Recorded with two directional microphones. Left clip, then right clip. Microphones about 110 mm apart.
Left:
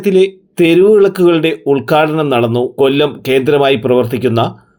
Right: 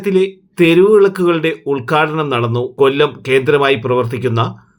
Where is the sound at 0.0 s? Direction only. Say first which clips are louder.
Left 4 dB; 30° left (ahead or behind).